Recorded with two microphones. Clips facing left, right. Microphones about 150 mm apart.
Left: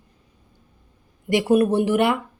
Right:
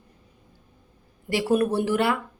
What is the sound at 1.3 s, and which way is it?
Speech, 15° left (ahead or behind).